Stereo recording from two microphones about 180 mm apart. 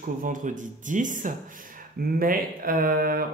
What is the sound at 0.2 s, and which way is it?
Speech, 45° right (ahead or behind).